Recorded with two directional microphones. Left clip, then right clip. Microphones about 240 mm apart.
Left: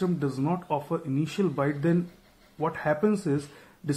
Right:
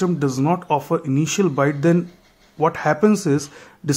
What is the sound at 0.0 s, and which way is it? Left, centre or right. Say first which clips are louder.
Speech: right 8 dB; right.